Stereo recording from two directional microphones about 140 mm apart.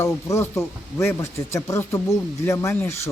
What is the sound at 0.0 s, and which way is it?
Speech, 20° left (ahead or behind).